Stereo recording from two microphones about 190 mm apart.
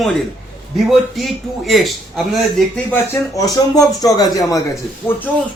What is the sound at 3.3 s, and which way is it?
Speech, 20° left (ahead or behind).